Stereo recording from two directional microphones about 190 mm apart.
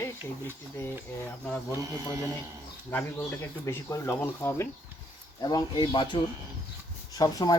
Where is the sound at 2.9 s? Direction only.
10° left (ahead or behind).